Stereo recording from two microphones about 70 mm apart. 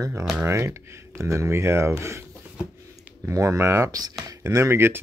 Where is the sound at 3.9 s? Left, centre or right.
Right.